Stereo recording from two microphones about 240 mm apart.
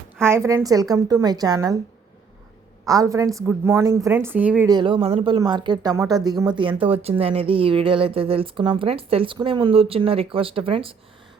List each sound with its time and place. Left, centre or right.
0.2 s a woman's voice: centre
2.8 s a woman's voice: centre
4.7 s speech: right